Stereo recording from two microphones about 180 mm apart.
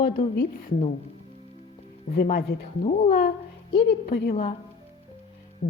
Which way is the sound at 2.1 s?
55° left (ahead or behind).